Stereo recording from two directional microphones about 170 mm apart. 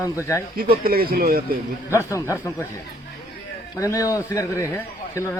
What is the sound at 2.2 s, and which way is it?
Speech, 15° left (ahead or behind).